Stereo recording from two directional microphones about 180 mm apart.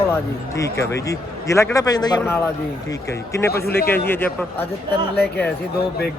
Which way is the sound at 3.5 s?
60° left (ahead or behind).